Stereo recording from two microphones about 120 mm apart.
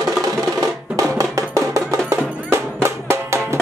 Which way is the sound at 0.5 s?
30° right (ahead or behind).